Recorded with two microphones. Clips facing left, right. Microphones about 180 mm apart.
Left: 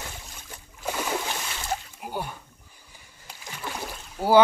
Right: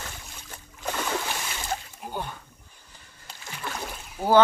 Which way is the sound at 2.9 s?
10° left (ahead or behind).